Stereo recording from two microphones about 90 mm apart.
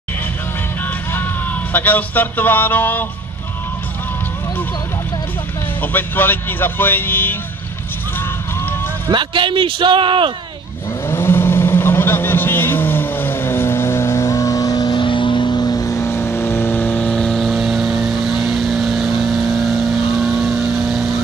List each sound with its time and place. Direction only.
1.1 s speech: 20° left (ahead or behind)
5.8 s speech: 20° left (ahead or behind)
9.0 s speech: 60° right (ahead or behind)
11.1 s vehicle: 25° left (ahead or behind); by 15.0 s 45° left (ahead or behind)
15.0 s vehicle: 65° left (ahead or behind); by 21.2 s centre (ahead or behind)